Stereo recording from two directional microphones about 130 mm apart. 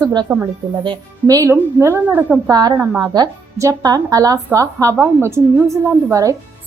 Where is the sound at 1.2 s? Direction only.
25° right (ahead or behind).